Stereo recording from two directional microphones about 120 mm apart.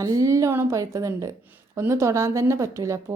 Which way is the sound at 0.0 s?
30° right (ahead or behind).